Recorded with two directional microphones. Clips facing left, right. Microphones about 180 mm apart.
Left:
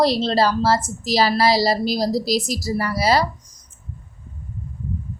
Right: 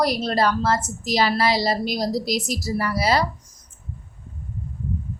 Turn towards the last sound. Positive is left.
turn(degrees=35)  # may be behind; listen again after turning